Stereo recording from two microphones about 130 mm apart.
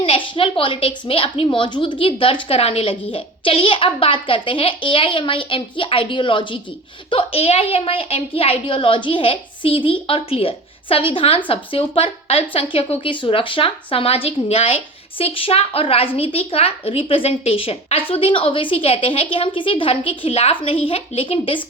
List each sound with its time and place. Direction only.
0.0 s a woman's voice: 45° left (ahead or behind)